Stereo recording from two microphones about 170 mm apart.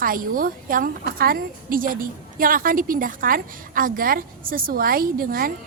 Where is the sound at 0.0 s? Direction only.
55° right (ahead or behind).